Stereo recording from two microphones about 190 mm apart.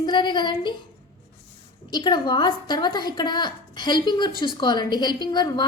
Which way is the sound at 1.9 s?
20° left (ahead or behind).